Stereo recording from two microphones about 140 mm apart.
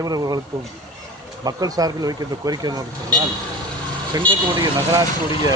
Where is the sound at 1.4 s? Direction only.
25° right (ahead or behind).